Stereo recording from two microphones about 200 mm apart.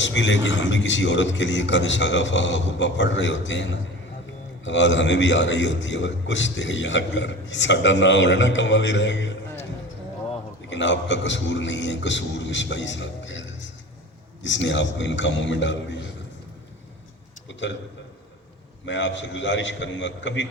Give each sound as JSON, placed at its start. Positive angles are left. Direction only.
{"t": 0.0, "sound": "a man's voice", "side_deg": 65}
{"t": 10.7, "sound": "a man's voice", "side_deg": 65}
{"t": 18.9, "sound": "a man's voice", "side_deg": 65}